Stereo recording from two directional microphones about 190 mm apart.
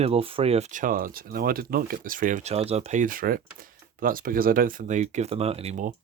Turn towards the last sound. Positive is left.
turn(degrees=-40)  # may be behind; listen again after turning